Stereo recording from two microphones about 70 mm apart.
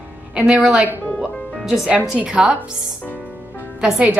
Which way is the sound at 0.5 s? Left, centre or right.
Centre.